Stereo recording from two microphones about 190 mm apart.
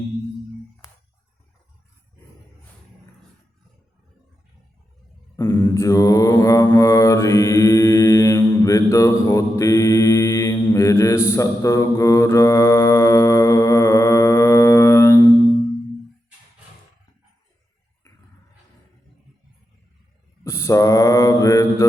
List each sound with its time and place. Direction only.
5.4 s mantra: 15° left (ahead or behind)
20.4 s mantra: 15° left (ahead or behind)